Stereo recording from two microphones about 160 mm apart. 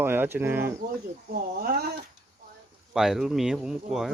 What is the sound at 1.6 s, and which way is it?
Speech, 70° right (ahead or behind).